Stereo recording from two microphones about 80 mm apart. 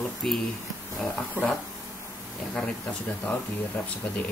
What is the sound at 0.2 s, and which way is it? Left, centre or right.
Speech, centre.